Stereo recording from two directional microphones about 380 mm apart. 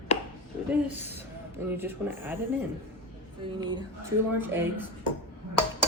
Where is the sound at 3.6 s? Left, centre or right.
Centre.